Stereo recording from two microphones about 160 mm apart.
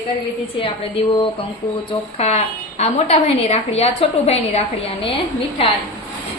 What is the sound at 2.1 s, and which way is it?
A woman's voice, 40° left (ahead or behind).